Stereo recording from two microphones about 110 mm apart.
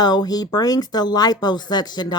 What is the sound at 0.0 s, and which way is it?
Speech, 40° left (ahead or behind).